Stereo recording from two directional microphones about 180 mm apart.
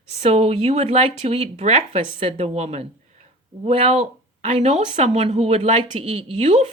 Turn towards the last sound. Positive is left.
turn(degrees=-35)  # may be behind; listen again after turning